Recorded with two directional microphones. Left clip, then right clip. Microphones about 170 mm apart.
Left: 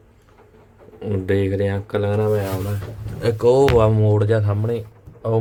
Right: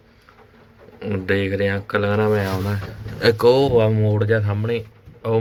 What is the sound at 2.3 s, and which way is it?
Speech, 10° right (ahead or behind).